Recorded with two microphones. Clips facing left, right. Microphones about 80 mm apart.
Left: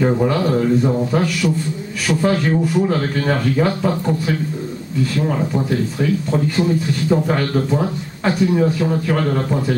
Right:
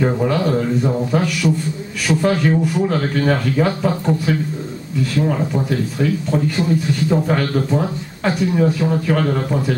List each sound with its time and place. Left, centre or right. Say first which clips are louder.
0.0 s speech: left 1 dB; centre